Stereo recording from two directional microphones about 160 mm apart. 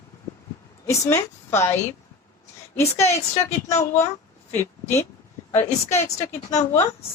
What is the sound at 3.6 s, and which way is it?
Speech, 45° left (ahead or behind).